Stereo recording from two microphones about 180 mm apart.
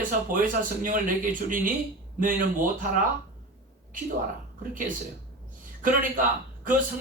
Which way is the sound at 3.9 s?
50° right (ahead or behind).